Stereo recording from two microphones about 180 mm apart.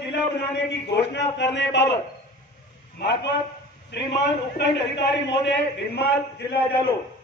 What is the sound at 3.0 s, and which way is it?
A man's voice, 70° left (ahead or behind).